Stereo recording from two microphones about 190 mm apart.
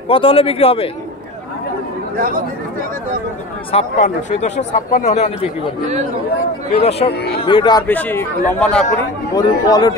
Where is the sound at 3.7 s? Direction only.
40° left (ahead or behind).